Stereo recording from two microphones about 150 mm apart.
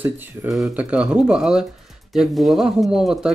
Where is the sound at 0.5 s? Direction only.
5° right (ahead or behind).